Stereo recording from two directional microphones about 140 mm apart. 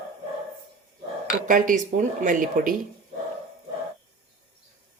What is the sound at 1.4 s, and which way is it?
Speech, 65° right (ahead or behind).